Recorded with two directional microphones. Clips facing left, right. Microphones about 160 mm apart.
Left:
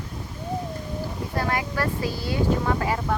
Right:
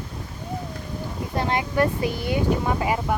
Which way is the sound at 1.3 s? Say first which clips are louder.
Right 4 dB; 25° right (ahead or behind).